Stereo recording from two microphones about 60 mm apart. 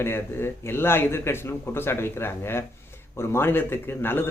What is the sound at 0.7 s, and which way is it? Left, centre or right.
A man's voice, left.